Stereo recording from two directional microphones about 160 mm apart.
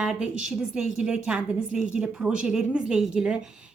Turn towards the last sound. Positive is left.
turn(degrees=-5)  # may be behind; listen again after turning